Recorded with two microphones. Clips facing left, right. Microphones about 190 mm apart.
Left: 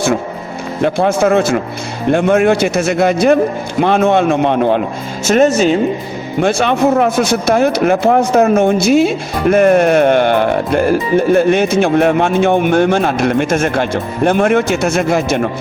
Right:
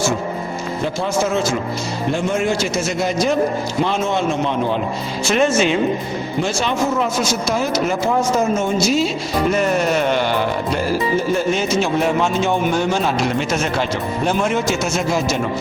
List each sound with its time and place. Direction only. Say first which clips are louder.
0.8 s speech: left 8 dB; 60° left (ahead or behind)
5.2 s speech: left 6 dB; 45° left (ahead or behind)
6.4 s speech: left 8 dB; 60° left (ahead or behind)